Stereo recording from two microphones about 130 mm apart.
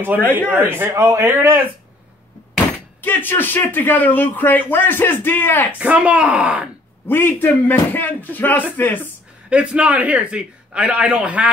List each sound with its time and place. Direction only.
0.5 s speech: 15° right (ahead or behind)
3.0 s a man's voice: 15° left (ahead or behind)
5.8 s a man's voice: 10° right (ahead or behind)
7.1 s a man's voice: 15° left (ahead or behind)
9.5 s a man's voice: 10° right (ahead or behind)